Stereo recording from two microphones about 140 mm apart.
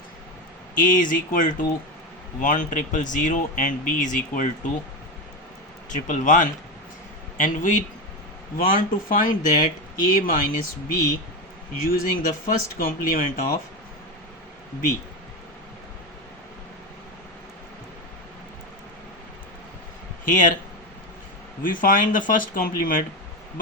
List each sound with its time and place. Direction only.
0.8 s speech: 70° left (ahead or behind)
5.9 s a man's voice: 65° left (ahead or behind)
8.5 s speech: 85° left
20.2 s speech: 65° left (ahead or behind)
21.6 s speech: 75° left (ahead or behind)